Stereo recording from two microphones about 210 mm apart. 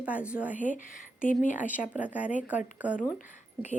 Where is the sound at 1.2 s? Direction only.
40° left (ahead or behind).